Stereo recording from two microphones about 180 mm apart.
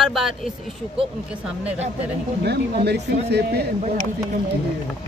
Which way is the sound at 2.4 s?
65° right (ahead or behind).